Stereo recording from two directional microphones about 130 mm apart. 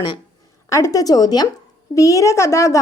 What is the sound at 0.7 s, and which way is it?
A woman's voice, 25° left (ahead or behind).